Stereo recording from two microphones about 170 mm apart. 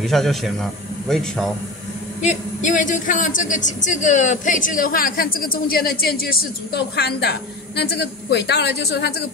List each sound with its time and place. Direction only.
0.0 s a man's voice: centre (ahead or behind)
2.2 s a man's voice: 45° left (ahead or behind); by 9.1 s 75° left (ahead or behind)